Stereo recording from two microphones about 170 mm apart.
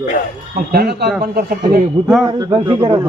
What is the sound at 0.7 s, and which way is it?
Speech, 65° right (ahead or behind).